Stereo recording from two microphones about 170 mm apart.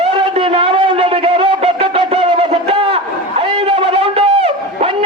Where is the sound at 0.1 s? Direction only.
30° right (ahead or behind).